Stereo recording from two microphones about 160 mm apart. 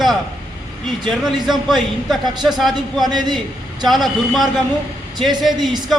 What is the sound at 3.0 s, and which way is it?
Speech, 25° right (ahead or behind).